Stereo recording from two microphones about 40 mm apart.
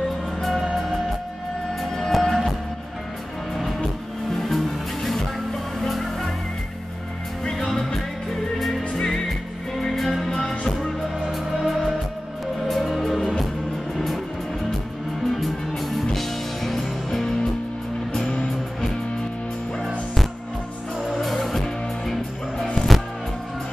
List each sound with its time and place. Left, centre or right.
0.4 s music: centre
1.8 s music: centre
4.3 s music: centre
7.5 s music: centre
11.2 s music: centre
15.2 s music: centre
18.2 s music: left
21.0 s music: centre